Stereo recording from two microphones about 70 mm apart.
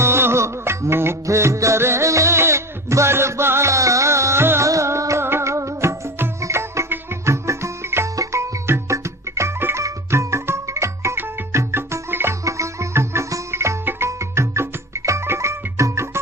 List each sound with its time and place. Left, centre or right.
0.0 s music: right
8.1 s music: right
12.5 s music: right